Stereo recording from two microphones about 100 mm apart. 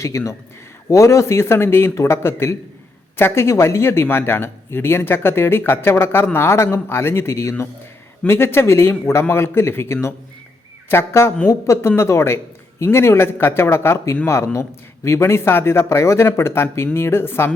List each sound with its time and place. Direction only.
0.1 s speech: 30° left (ahead or behind)